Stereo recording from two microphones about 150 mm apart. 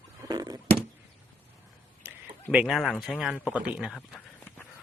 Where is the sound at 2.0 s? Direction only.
15° right (ahead or behind).